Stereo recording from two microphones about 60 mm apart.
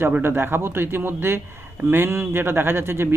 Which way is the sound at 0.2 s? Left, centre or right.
Right.